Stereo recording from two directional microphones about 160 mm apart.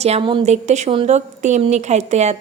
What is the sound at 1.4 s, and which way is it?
Speech, 45° right (ahead or behind).